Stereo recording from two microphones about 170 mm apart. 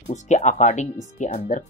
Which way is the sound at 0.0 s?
45° left (ahead or behind).